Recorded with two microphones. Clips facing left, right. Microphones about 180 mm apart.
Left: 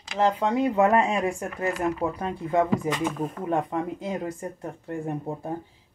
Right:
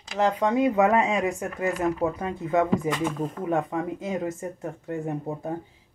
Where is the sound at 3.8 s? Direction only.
20° right (ahead or behind).